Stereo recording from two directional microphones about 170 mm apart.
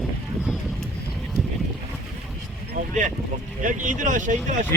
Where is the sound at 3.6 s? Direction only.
50° right (ahead or behind).